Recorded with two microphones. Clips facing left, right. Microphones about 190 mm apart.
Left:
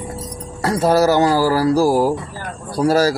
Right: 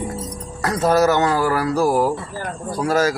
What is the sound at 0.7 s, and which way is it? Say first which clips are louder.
Speech: left 2 dB; 30° left (ahead or behind).